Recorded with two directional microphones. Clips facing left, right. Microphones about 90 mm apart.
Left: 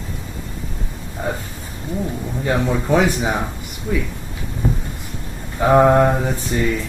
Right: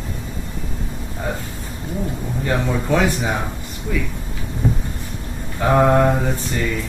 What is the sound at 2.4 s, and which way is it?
Speech, 15° left (ahead or behind).